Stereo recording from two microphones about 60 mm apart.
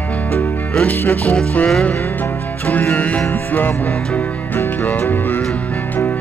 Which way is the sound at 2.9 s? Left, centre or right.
Left.